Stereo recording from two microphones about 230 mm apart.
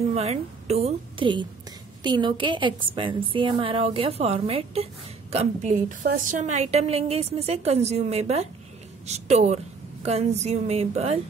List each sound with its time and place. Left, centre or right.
0.1 s a woman's voice: right